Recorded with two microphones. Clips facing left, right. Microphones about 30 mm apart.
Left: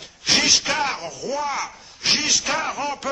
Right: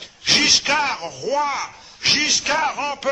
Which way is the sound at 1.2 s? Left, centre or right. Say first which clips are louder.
Right 6 dB; right.